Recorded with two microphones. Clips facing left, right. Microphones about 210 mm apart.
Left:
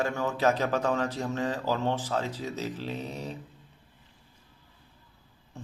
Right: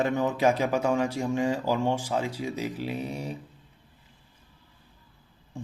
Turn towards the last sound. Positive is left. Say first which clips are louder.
# right 5 dB
turn(degrees=-15)  # may be behind; listen again after turning